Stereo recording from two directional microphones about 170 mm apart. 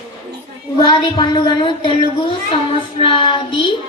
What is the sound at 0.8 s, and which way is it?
Speech, 25° left (ahead or behind).